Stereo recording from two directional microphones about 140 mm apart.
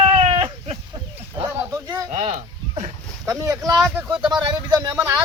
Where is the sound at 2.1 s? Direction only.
50° right (ahead or behind).